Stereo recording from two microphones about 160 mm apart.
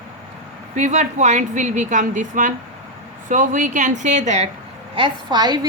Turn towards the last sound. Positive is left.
turn(degrees=-25)  # may be behind; listen again after turning